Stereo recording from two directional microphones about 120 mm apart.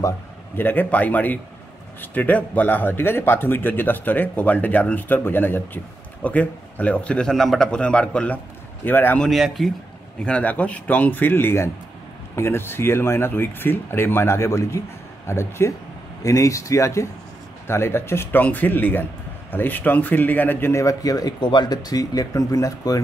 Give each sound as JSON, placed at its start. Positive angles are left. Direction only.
{"t": 0.6, "sound": "a man's voice", "side_deg": 15}
{"t": 9.2, "sound": "a man's voice", "side_deg": 0}